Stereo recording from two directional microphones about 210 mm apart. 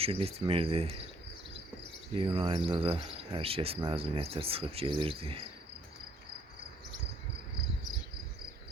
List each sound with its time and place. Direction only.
0.0 s cricket: 25° right (ahead or behind)
2.1 s cricket: 25° right (ahead or behind)